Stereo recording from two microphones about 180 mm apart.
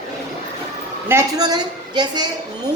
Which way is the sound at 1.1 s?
20° right (ahead or behind).